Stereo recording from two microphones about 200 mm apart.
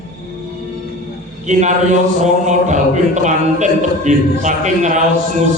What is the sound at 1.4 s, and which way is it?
A man's voice, 35° right (ahead or behind).